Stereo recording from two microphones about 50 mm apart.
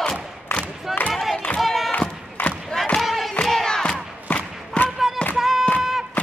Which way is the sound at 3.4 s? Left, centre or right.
Centre.